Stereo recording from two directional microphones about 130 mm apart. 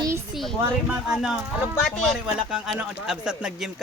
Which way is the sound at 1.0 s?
5° right (ahead or behind).